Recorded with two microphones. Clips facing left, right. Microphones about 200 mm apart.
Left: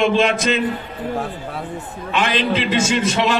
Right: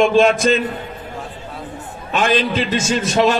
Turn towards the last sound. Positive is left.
turn(degrees=-45)  # may be behind; listen again after turning